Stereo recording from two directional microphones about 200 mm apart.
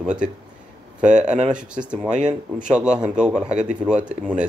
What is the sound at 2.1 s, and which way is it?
Speech, 35° right (ahead or behind).